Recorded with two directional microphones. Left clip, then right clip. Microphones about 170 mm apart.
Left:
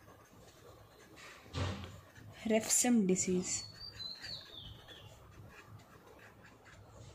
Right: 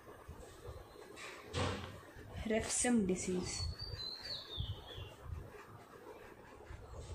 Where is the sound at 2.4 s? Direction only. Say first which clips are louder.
Left 4 dB; 40° left (ahead or behind).